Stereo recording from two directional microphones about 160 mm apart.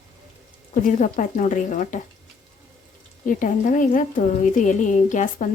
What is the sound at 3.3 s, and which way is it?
A woman's voice, 55° left (ahead or behind).